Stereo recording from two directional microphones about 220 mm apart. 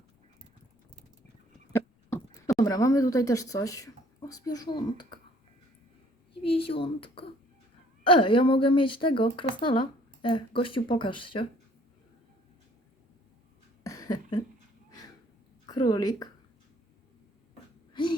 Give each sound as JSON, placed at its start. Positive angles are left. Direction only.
{"t": 1.7, "sound": "speech", "side_deg": 10}
{"t": 6.6, "sound": "speech", "side_deg": 25}
{"t": 13.8, "sound": "cough", "side_deg": 15}
{"t": 15.7, "sound": "a woman's voice", "side_deg": 15}